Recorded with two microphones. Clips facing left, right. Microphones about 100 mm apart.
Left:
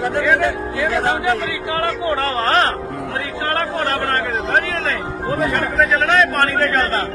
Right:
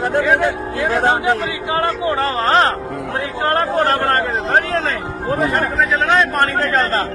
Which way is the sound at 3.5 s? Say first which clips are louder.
Right 4 dB; 35° right (ahead or behind).